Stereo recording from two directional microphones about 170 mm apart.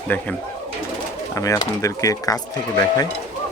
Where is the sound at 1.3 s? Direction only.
20° left (ahead or behind).